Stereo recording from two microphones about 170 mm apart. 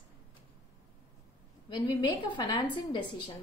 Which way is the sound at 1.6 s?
25° left (ahead or behind).